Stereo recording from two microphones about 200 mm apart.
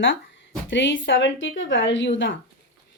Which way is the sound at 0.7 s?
70° left (ahead or behind).